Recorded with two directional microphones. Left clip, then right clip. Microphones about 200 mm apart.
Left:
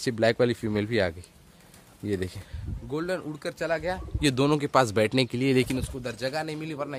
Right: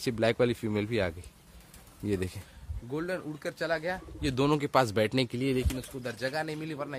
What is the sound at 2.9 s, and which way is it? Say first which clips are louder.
A man's voice: left 4 dB; 10° left (ahead or behind).